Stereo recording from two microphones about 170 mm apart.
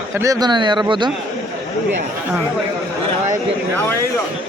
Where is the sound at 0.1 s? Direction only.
20° right (ahead or behind).